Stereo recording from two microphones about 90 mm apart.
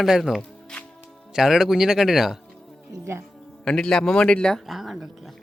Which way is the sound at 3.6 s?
10° left (ahead or behind).